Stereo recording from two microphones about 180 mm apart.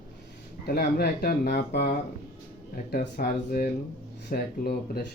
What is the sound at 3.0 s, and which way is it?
Speech, 55° left (ahead or behind).